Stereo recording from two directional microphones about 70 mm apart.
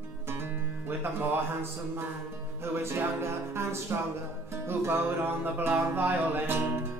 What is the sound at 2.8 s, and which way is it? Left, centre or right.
Music, right.